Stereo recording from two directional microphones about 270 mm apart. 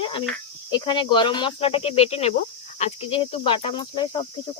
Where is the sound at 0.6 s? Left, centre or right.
Centre.